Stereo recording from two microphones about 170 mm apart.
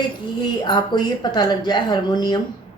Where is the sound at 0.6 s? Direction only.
25° left (ahead or behind).